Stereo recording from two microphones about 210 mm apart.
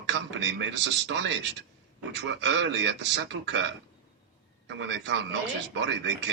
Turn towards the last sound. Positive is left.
turn(degrees=-55)  # may be behind; listen again after turning